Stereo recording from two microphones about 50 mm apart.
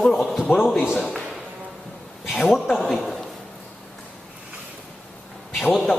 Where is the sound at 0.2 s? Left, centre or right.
Centre.